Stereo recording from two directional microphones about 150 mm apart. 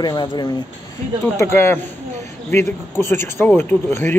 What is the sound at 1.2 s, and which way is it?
Speech, 15° left (ahead or behind).